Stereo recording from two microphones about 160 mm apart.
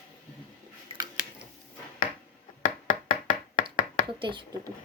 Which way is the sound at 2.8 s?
55° left (ahead or behind).